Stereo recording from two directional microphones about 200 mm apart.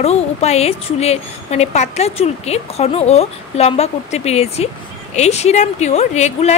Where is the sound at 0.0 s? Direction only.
30° left (ahead or behind).